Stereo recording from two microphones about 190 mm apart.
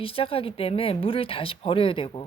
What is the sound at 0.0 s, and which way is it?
Speech, 30° left (ahead or behind).